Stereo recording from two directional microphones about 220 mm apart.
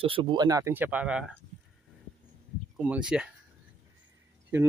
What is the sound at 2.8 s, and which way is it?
Speech, 5° right (ahead or behind).